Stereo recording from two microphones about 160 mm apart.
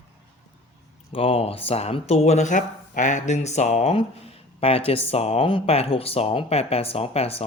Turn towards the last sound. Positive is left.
turn(degrees=40)  # may be behind; listen again after turning